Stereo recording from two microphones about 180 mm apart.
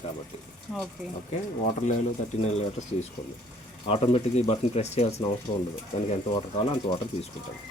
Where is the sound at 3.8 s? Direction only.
35° left (ahead or behind).